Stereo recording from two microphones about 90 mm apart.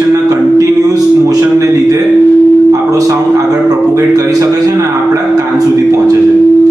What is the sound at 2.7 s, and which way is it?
Tuning fork, 40° right (ahead or behind).